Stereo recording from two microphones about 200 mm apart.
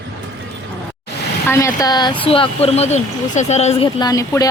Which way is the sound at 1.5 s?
15° left (ahead or behind).